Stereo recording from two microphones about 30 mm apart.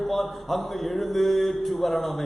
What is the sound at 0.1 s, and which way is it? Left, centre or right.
A man's voice, centre.